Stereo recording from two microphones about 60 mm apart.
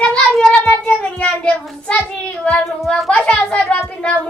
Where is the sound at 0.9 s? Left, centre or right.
Left.